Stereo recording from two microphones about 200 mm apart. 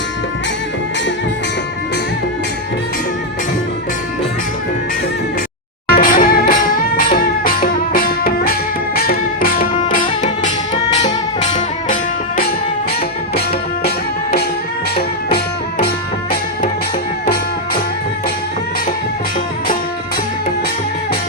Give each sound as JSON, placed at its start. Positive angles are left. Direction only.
{"t": 5.9, "sound": "music", "side_deg": 45}
{"t": 13.8, "sound": "music", "side_deg": 50}